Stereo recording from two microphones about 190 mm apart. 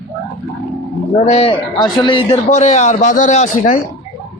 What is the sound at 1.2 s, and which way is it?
A man's voice, 30° left (ahead or behind).